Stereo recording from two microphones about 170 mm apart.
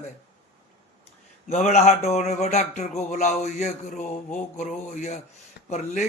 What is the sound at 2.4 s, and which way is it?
Mantra, 40° left (ahead or behind).